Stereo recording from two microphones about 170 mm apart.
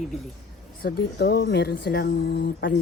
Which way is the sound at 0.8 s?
60° left (ahead or behind).